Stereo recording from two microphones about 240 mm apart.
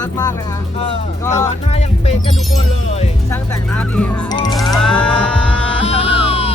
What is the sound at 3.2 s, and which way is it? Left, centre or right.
Speech, centre.